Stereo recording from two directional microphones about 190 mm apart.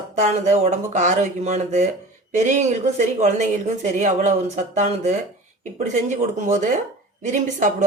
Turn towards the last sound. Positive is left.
turn(degrees=-40)  # may be behind; listen again after turning